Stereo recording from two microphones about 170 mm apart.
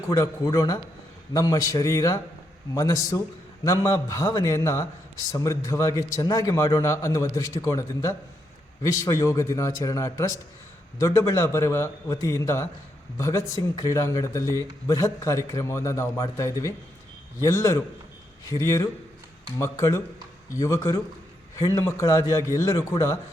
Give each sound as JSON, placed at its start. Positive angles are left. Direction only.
{"t": 0.1, "sound": "a man's voice", "side_deg": 20}